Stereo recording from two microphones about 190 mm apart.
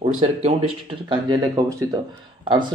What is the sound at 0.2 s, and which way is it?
A man's voice, 30° right (ahead or behind).